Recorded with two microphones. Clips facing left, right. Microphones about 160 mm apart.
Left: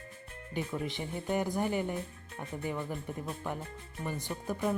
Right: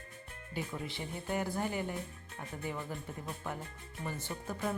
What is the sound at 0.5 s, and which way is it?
Speech, 20° left (ahead or behind).